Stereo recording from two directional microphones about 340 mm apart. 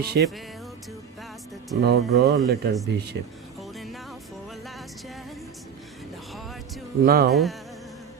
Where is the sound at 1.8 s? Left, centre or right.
Right.